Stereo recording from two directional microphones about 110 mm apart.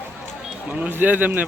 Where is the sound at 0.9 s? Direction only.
15° right (ahead or behind).